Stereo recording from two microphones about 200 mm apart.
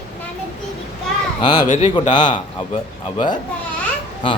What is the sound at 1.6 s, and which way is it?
Speech, 35° left (ahead or behind).